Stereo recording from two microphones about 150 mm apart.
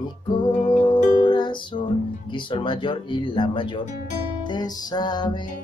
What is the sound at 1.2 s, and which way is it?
Music, 30° left (ahead or behind).